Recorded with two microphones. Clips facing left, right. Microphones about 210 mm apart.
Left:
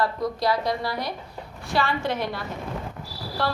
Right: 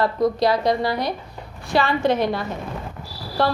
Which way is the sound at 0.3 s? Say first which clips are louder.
Right 5 dB; 20° right (ahead or behind).